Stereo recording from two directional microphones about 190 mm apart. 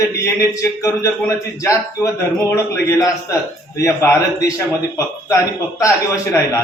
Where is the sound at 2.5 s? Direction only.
15° left (ahead or behind).